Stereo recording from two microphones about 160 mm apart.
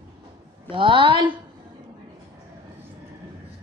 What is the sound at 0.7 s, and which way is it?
Speech, 30° right (ahead or behind).